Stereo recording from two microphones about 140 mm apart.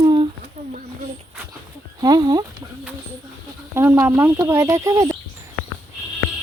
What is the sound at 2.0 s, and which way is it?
Speech, 30° right (ahead or behind).